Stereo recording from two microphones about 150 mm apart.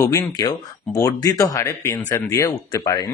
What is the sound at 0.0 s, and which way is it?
Speech, 20° left (ahead or behind).